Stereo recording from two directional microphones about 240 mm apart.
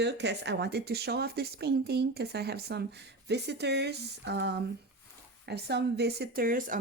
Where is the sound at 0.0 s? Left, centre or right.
Right.